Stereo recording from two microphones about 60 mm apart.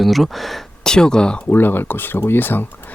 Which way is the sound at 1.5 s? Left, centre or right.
Left.